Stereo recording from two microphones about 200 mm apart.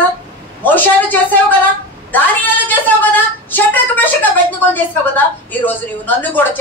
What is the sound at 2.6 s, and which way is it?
A woman's voice, 10° left (ahead or behind).